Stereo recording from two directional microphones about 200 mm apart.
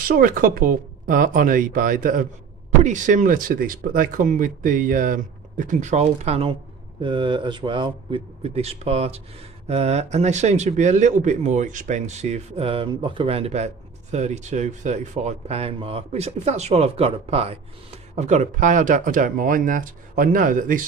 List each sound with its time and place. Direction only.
0.1 s a man's voice: 45° right (ahead or behind)